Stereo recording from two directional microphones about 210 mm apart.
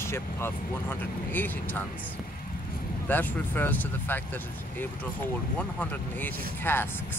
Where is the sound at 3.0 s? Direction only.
10° left (ahead or behind).